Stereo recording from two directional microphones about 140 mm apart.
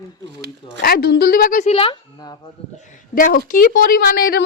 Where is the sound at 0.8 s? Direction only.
90° left.